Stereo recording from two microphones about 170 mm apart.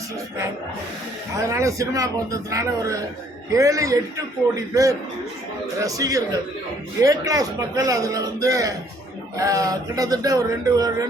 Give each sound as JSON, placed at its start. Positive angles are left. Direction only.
{"t": 1.4, "sound": "speech", "side_deg": -20}